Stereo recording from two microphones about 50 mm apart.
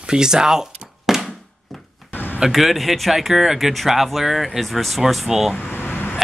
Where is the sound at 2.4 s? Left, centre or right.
Centre.